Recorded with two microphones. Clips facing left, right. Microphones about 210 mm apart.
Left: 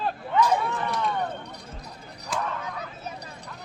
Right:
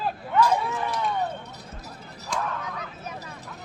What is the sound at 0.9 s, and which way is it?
Run, centre (ahead or behind).